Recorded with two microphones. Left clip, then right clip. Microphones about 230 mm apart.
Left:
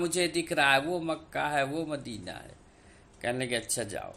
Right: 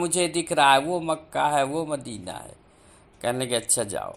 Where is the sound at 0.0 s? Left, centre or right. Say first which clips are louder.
Right 4 dB; centre.